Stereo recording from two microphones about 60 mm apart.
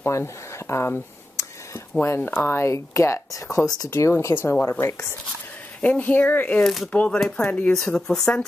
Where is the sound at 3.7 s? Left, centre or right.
Left.